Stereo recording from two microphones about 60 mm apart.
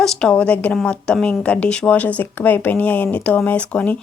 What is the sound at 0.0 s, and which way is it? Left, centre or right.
Speech, centre.